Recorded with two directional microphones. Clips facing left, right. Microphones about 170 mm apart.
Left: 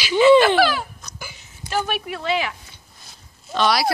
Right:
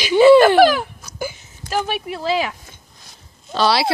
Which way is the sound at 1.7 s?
30° right (ahead or behind).